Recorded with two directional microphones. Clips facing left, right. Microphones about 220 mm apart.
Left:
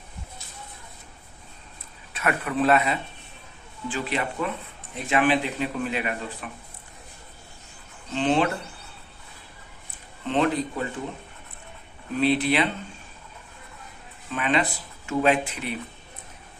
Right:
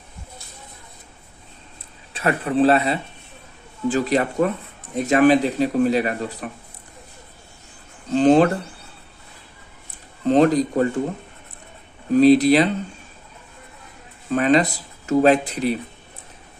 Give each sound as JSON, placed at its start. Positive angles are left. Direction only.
{"t": 2.1, "sound": "speech", "side_deg": -30}
{"t": 8.1, "sound": "speech", "side_deg": -40}
{"t": 10.2, "sound": "speech", "side_deg": -40}
{"t": 12.1, "sound": "speech", "side_deg": -40}
{"t": 14.3, "sound": "speech", "side_deg": -40}